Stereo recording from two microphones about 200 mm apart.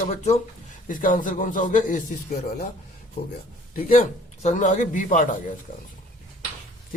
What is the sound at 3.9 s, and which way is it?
A man's voice, 40° left (ahead or behind).